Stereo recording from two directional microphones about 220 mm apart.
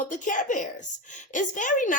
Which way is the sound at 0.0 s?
35° left (ahead or behind).